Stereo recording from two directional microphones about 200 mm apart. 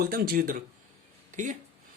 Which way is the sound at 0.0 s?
50° right (ahead or behind).